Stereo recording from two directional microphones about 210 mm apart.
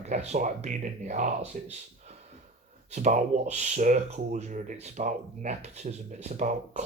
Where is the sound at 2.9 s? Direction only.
35° right (ahead or behind).